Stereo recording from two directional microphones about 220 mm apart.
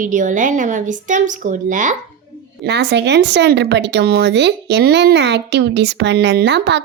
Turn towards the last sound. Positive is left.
turn(degrees=-50)  # may be behind; listen again after turning